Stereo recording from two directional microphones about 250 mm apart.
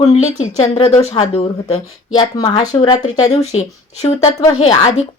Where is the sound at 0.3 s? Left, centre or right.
Left.